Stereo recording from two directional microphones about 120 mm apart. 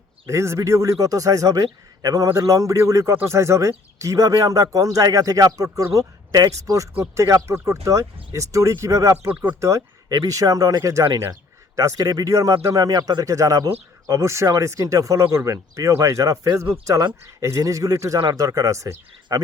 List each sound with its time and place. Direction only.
0.3 s a man's voice: 25° right (ahead or behind)